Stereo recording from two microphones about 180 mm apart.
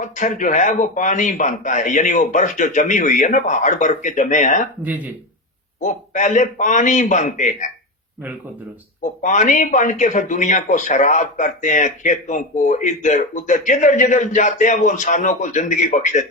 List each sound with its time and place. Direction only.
0.0 s a man's voice: 45° left (ahead or behind)
4.8 s speech: 10° right (ahead or behind)
5.8 s a man's voice: 45° left (ahead or behind)
9.0 s a man's voice: 45° left (ahead or behind)